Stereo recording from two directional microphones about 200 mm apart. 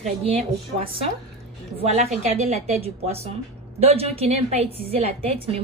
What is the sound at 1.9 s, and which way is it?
A woman's voice, 35° right (ahead or behind).